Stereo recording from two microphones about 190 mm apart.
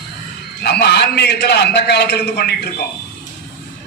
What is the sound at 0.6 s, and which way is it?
A man's voice, 60° left (ahead or behind).